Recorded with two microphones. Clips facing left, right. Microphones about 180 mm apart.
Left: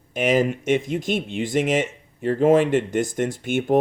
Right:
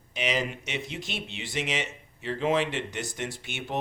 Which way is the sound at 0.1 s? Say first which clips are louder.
Left 10 dB; 50° left (ahead or behind).